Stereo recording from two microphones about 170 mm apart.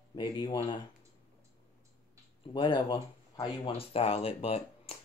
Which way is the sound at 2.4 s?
25° left (ahead or behind).